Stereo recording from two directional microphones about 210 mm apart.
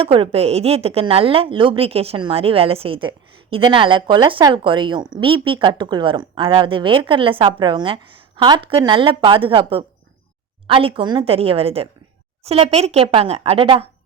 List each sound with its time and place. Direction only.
0.0 s a woman's voice: 25° right (ahead or behind)